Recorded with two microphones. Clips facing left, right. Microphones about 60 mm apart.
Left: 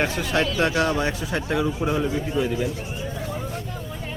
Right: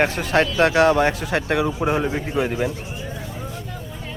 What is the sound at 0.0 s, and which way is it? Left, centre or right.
A man's voice, right.